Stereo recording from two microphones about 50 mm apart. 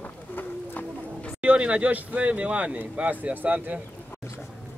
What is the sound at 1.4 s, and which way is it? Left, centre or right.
Speech, right.